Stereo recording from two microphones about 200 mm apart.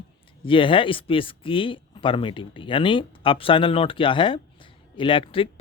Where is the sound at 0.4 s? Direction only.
25° left (ahead or behind).